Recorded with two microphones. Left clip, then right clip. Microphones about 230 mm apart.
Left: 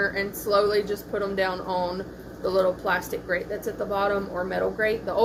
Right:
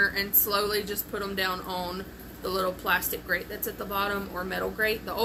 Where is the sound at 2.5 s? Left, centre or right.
Centre.